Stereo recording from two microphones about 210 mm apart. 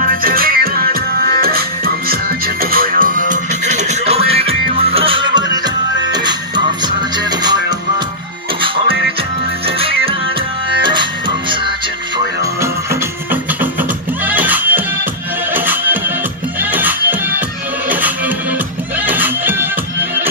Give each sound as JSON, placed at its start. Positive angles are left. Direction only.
{"t": 0.1, "sound": "music", "side_deg": -45}
{"t": 8.5, "sound": "music", "side_deg": -25}
{"t": 14.2, "sound": "music", "side_deg": -10}
{"t": 19.0, "sound": "music", "side_deg": -10}